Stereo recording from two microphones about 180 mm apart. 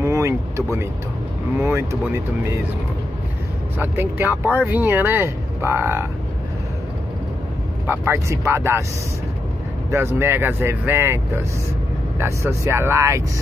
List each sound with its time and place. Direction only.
0.0 s vehicle: 15° right (ahead or behind)
1.6 s speech: 15° right (ahead or behind)
3.7 s speech: 10° right (ahead or behind)
7.8 s speech: 10° right (ahead or behind)
9.8 s speech: 15° right (ahead or behind)